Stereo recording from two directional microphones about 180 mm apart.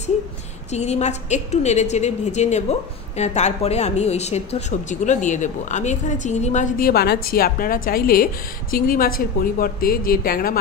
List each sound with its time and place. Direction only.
0.7 s a woman's voice: 40° left (ahead or behind); by 10.6 s 55° left (ahead or behind)